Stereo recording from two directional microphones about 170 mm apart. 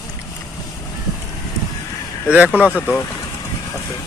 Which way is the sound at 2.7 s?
15° left (ahead or behind).